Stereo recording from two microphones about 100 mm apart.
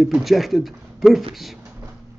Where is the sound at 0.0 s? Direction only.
Centre (ahead or behind).